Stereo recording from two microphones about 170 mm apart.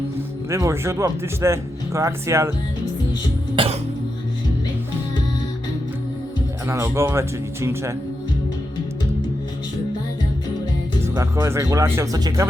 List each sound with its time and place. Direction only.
0.5 s speech: 15° right (ahead or behind)
3.5 s music: 30° right (ahead or behind)
6.7 s speech: 15° right (ahead or behind)
11.0 s speech: 20° right (ahead or behind)